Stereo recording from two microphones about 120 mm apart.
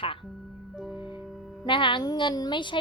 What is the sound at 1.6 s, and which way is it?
A woman's voice, 45° left (ahead or behind).